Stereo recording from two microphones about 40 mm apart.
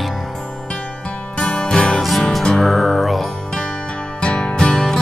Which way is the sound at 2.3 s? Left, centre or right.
Centre.